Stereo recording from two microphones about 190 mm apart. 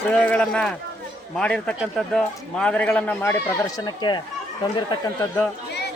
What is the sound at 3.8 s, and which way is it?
Speech, 20° left (ahead or behind).